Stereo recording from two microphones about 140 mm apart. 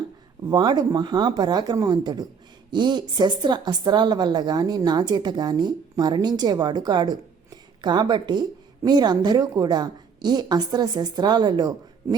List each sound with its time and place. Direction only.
0.4 s a woman's voice: 30° right (ahead or behind)